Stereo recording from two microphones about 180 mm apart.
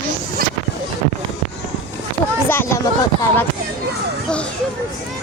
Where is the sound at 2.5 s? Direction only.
10° left (ahead or behind).